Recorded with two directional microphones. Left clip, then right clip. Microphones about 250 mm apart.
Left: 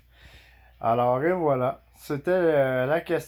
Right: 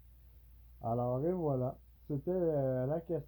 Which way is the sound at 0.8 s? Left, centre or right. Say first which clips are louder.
Left 13 dB; left.